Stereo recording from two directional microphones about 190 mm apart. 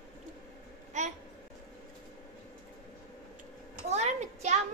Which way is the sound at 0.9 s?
40° right (ahead or behind).